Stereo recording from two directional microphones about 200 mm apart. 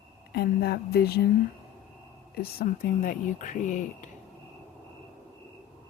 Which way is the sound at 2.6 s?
45° left (ahead or behind).